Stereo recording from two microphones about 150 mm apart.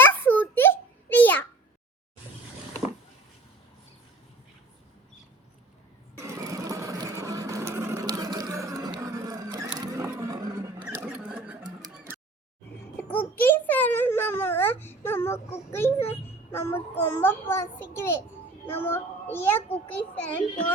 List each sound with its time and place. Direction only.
0.0 s a sound: 15° left (ahead or behind)
6.1 s sewing machine: 20° right (ahead or behind)
10.0 s vehicle: 15° right (ahead or behind)
11.1 s sewing machine: 5° right (ahead or behind)
13.0 s a sound: 10° left (ahead or behind)
16.5 s a child's voice: 15° left (ahead or behind)